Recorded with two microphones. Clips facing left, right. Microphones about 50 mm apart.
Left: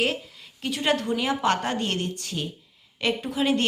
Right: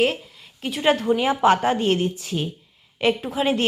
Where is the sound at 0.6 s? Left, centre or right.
Centre.